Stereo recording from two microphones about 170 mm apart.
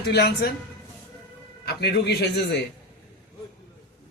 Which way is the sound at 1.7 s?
70° left (ahead or behind).